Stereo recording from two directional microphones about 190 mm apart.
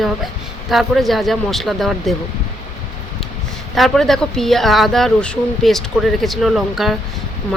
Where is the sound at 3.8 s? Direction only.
Centre (ahead or behind).